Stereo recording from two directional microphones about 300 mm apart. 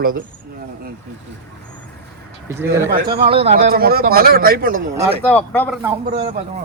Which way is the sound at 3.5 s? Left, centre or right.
Right.